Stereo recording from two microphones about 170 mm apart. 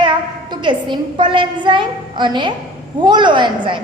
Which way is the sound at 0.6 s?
30° right (ahead or behind).